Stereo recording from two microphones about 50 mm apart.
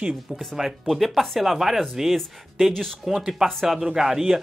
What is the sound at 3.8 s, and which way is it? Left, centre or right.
Speech, centre.